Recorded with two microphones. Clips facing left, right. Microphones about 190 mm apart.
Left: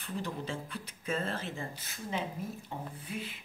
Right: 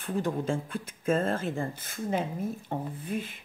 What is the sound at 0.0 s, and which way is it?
A woman's voice, 50° right (ahead or behind).